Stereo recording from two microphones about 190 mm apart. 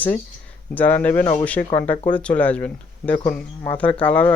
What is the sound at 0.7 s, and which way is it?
Speech, 10° left (ahead or behind).